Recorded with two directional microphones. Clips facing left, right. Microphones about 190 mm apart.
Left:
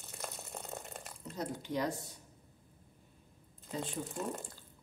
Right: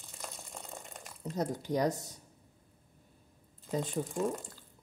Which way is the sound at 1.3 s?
40° right (ahead or behind).